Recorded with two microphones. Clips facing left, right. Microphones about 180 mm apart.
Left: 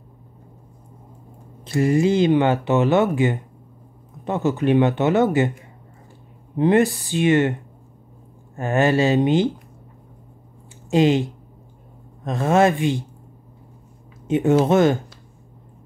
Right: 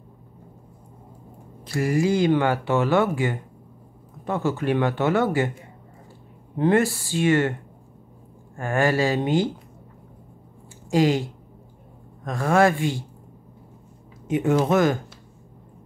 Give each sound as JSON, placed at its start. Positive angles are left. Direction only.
{"t": 1.6, "sound": "speech", "side_deg": 25}
{"t": 6.5, "sound": "speech", "side_deg": 20}
{"t": 8.5, "sound": "speech", "side_deg": 20}
{"t": 10.9, "sound": "speech", "side_deg": 20}
{"t": 12.3, "sound": "speech", "side_deg": 20}
{"t": 14.2, "sound": "speech", "side_deg": 25}